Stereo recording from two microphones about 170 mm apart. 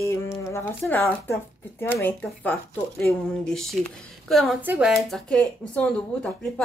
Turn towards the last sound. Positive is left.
turn(degrees=5)  # may be behind; listen again after turning